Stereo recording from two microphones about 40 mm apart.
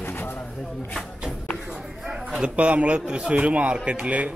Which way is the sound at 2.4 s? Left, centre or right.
Right.